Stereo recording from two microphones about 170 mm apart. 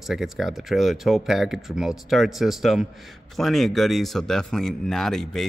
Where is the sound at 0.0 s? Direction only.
Centre (ahead or behind).